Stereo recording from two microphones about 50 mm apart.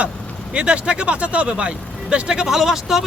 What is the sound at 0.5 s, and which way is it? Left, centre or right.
Speech, right.